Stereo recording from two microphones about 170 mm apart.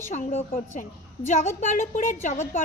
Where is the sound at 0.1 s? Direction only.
45° left (ahead or behind).